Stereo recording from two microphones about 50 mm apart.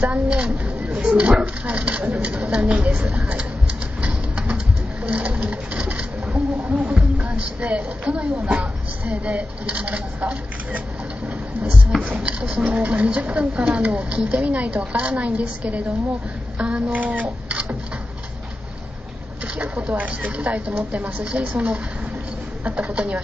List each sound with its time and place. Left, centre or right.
0.0 s speech: right
4.0 s a sound: right
5.0 s pigeon: right
6.9 s speech: right
12.0 s speech: right
16.5 s a sound: right
16.9 s speech: right
19.6 s speech: right